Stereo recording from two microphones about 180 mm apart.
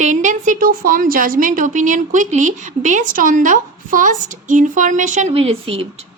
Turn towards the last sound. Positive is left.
turn(degrees=-30)  # may be behind; listen again after turning